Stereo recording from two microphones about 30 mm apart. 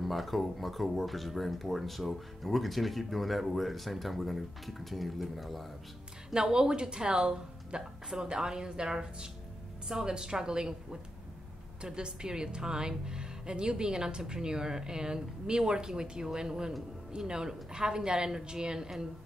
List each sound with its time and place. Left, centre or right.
0.0 s speech: centre
6.3 s a woman's voice: right